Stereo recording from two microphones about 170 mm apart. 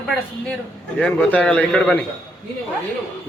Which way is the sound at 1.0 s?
10° left (ahead or behind).